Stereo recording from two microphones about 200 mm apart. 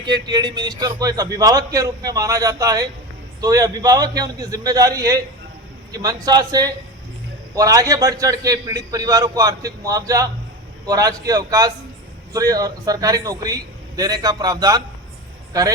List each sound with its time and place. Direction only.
0.0 s a man's voice: 20° right (ahead or behind)